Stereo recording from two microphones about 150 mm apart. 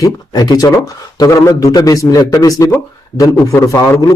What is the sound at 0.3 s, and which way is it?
Speech, 25° left (ahead or behind).